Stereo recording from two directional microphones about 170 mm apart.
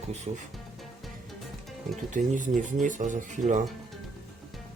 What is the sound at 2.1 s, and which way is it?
Speech, 50° right (ahead or behind).